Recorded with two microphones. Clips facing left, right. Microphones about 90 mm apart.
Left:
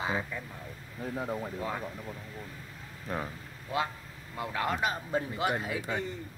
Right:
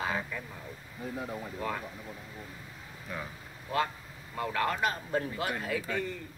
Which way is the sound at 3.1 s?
40° left (ahead or behind).